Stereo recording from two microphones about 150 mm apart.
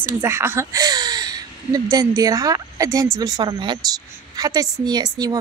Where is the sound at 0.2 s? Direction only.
15° right (ahead or behind).